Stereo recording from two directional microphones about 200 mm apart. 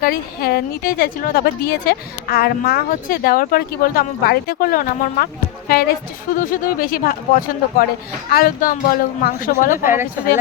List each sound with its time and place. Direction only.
0.0 s a woman's voice: 50° left (ahead or behind)
9.7 s speech: 10° right (ahead or behind)